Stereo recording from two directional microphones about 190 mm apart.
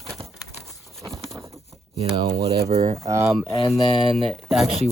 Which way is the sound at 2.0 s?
30° right (ahead or behind).